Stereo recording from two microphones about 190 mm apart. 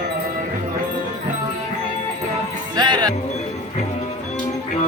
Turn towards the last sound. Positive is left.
turn(degrees=-25)  # may be behind; listen again after turning